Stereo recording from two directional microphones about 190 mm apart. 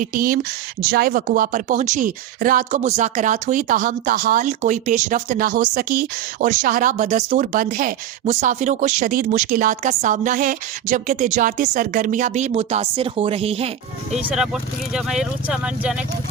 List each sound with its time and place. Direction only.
0.0 s speech: 45° right (ahead or behind); by 14.2 s 30° right (ahead or behind)
14.3 s speech: 5° right (ahead or behind)